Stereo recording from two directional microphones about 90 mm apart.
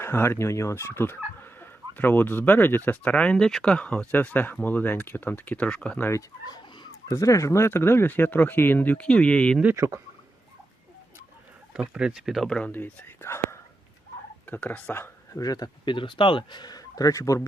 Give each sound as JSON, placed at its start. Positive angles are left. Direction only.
{"t": 0.0, "sound": "speech", "side_deg": 25}
{"t": 6.0, "sound": "turkey", "side_deg": 30}
{"t": 6.5, "sound": "speech", "side_deg": 45}
{"t": 9.7, "sound": "speech", "side_deg": -30}
{"t": 11.7, "sound": "speech", "side_deg": -10}
{"t": 12.7, "sound": "speech", "side_deg": 25}
{"t": 14.4, "sound": "speech", "side_deg": 20}
{"t": 15.4, "sound": "speech", "side_deg": 45}